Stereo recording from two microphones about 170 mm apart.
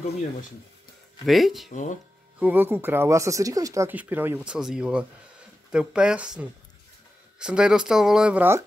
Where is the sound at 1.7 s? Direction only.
45° left (ahead or behind).